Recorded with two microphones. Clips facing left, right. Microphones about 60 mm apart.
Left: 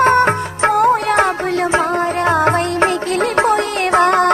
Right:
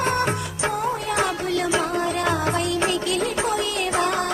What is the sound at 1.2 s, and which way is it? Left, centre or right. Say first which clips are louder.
Music: left 6 dB; left.